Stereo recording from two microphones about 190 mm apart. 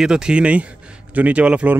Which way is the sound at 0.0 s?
5° right (ahead or behind).